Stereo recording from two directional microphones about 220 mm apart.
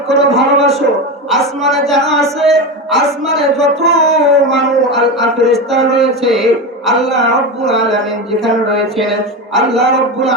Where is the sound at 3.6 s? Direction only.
30° right (ahead or behind).